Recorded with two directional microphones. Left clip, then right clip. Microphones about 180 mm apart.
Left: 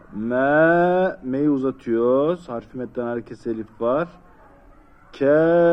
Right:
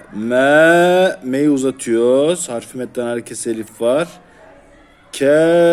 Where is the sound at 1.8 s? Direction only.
45° right (ahead or behind).